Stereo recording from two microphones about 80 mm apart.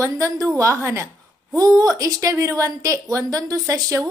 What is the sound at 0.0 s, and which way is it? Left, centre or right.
A woman's voice, right.